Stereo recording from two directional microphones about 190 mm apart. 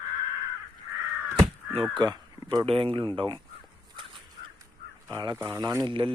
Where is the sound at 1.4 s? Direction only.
25° right (ahead or behind).